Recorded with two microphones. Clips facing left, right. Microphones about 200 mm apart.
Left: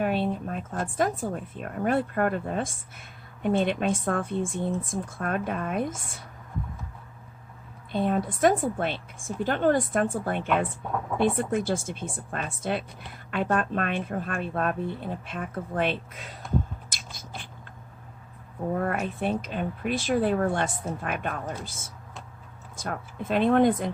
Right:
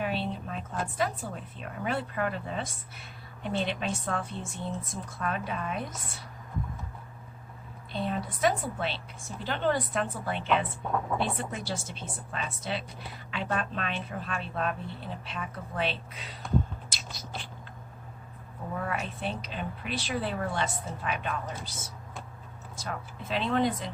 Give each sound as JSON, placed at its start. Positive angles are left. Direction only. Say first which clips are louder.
{"t": 0.0, "sound": "a woman's voice", "louder": "left 6 dB", "side_deg": 50}
{"t": 7.9, "sound": "a woman's voice", "louder": "left 7 dB", "side_deg": 50}
{"t": 16.9, "sound": "a sound", "louder": "right 1 dB", "side_deg": 50}
{"t": 18.7, "sound": "a woman's voice", "louder": "left 6 dB", "side_deg": 50}